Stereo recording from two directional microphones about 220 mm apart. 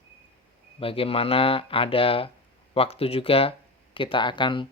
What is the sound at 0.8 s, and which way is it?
Speech, 25° left (ahead or behind).